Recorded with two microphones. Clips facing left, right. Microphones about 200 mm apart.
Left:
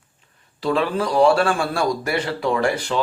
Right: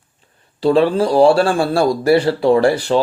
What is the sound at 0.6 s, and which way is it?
A man's voice, 30° right (ahead or behind).